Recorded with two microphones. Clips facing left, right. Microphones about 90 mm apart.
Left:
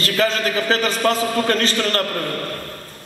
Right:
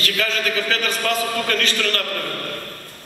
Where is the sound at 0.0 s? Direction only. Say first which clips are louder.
Left 4 dB; 35° left (ahead or behind).